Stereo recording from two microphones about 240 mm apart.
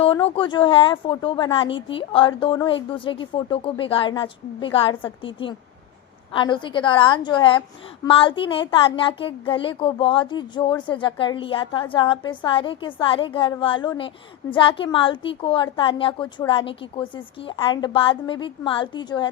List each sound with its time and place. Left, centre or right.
0.0 s speech: left